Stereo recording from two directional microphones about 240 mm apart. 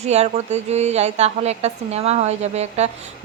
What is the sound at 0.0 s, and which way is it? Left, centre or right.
A woman's voice, right.